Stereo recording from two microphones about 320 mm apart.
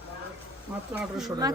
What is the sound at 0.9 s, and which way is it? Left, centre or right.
Speech, centre.